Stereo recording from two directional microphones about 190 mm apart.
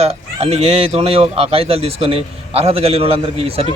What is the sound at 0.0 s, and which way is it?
Speech, 30° right (ahead or behind).